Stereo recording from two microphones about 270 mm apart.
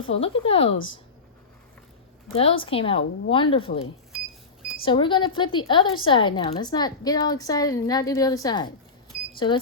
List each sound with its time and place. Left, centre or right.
0.1 s a woman's voice: left
0.7 s speech: left
2.3 s a woman's voice: left
4.8 s a woman's voice: centre